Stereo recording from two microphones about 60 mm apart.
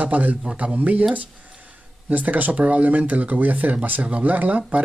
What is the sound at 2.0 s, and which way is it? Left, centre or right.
Speech, right.